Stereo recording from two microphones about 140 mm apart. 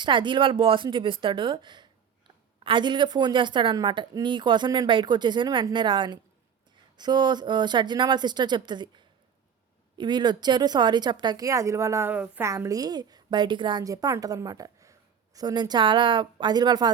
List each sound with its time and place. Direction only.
0.0 s a woman's voice: 35° right (ahead or behind); by 12.5 s 10° right (ahead or behind)
12.5 s a woman's voice: 25° right (ahead or behind)